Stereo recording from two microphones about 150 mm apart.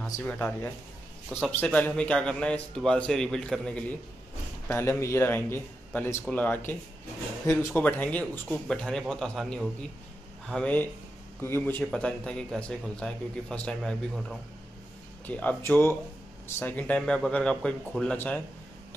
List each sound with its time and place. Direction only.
0.0 s speech: 10° left (ahead or behind)
15.2 s speech: 10° left (ahead or behind)